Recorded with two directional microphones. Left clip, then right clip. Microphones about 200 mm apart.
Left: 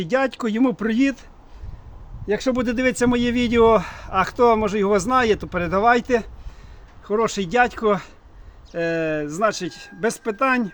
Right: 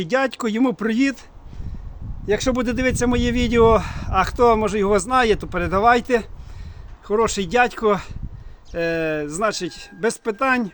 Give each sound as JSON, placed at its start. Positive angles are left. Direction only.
{"t": 0.0, "sound": "speech", "side_deg": -10}
{"t": 2.2, "sound": "speech", "side_deg": -20}